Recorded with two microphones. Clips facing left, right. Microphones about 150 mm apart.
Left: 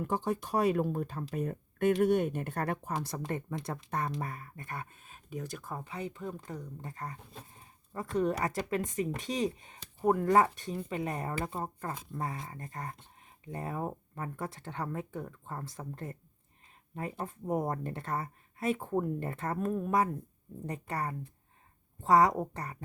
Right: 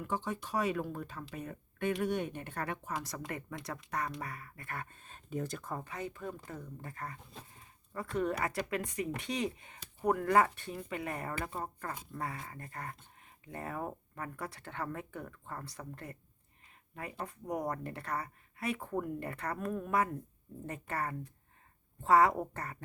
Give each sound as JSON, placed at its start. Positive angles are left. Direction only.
{"t": 0.0, "sound": "speech", "side_deg": 40}
{"t": 5.8, "sound": "speech", "side_deg": 20}